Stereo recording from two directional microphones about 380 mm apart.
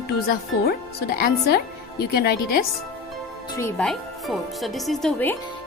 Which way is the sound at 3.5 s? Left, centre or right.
Centre.